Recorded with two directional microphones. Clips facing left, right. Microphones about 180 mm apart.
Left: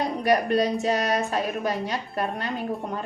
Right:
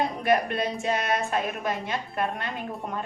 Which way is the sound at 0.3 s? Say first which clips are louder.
Left 4 dB; 40° left (ahead or behind).